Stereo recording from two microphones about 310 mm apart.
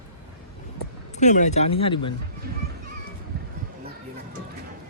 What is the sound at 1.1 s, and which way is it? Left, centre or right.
Speech, left.